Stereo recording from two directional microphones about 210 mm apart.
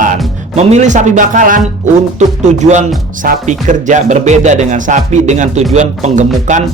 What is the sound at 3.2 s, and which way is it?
Speech, 40° right (ahead or behind).